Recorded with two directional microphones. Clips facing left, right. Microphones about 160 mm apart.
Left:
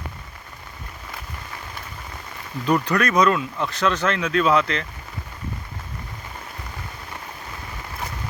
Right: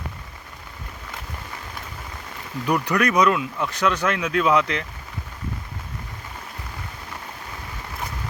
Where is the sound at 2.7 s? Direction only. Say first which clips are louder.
Left 1 dB; 15° right (ahead or behind).